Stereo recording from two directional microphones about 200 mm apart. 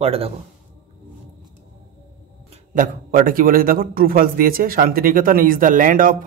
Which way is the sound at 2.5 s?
40° right (ahead or behind).